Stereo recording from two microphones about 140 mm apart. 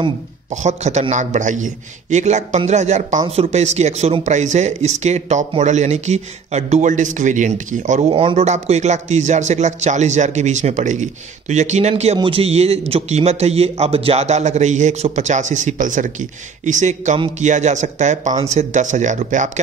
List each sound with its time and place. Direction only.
0.5 s a man's voice: 55° right (ahead or behind)
8.1 s a man's voice: 40° right (ahead or behind); by 19.6 s 60° right (ahead or behind)